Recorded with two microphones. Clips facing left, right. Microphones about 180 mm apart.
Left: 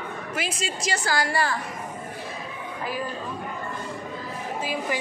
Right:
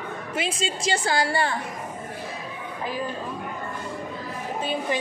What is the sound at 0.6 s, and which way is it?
Speech, 25° right (ahead or behind).